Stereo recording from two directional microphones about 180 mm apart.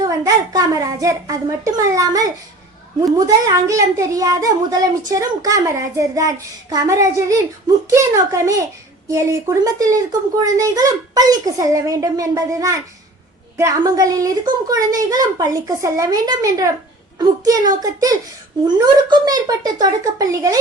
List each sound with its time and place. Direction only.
0.0 s a child's voice: 20° right (ahead or behind)